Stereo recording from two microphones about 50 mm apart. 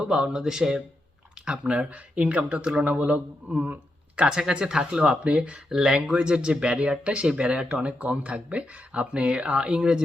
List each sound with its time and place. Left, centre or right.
0.0 s speech: centre; by 3.8 s right
4.3 s speech: centre
5.2 s speech: right
5.6 s speech: centre